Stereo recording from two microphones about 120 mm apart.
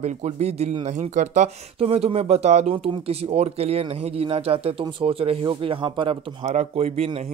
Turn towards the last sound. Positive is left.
turn(degrees=-55)  # may be behind; listen again after turning